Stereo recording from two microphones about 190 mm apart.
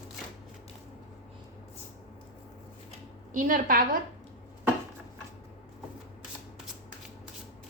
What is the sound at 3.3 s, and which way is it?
Speech, 45° right (ahead or behind).